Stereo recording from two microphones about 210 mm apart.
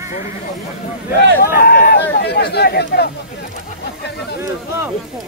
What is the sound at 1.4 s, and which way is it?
Speech, 45° left (ahead or behind).